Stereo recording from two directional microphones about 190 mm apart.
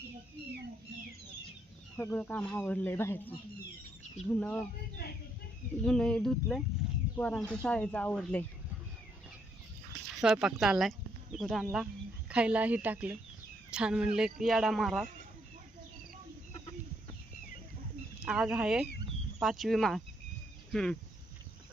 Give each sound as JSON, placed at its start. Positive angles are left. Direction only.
{"t": 2.0, "sound": "speech", "side_deg": 10}
{"t": 5.8, "sound": "speech", "side_deg": 5}
{"t": 10.2, "sound": "speech", "side_deg": -5}
{"t": 18.2, "sound": "speech", "side_deg": 0}